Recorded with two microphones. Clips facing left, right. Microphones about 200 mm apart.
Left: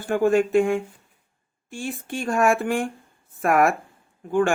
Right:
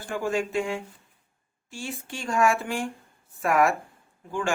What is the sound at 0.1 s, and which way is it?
Speech, 55° left (ahead or behind).